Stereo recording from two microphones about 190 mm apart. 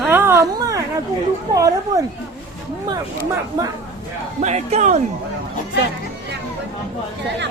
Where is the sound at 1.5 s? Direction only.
15° right (ahead or behind).